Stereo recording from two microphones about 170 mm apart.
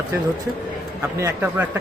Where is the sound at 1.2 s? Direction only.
10° right (ahead or behind).